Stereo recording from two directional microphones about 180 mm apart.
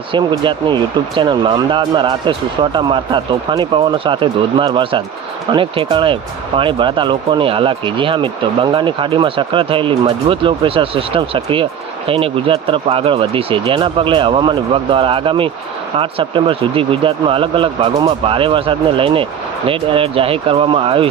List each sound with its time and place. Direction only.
0.1 s speech: 25° right (ahead or behind)